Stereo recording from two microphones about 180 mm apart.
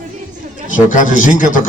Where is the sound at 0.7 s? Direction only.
45° left (ahead or behind).